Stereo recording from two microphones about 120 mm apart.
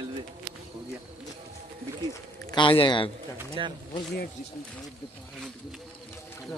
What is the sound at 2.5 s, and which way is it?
Speech, 45° left (ahead or behind).